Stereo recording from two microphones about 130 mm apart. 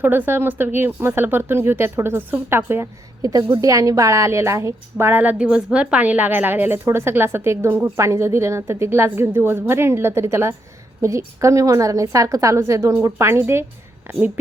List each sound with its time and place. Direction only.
0.0 s a woman's voice: 15° right (ahead or behind)